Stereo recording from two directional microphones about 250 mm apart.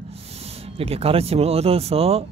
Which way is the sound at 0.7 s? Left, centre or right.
Right.